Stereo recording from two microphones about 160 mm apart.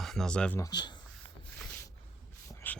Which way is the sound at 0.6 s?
25° left (ahead or behind).